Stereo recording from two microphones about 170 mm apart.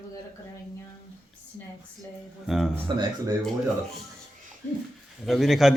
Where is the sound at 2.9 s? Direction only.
30° right (ahead or behind).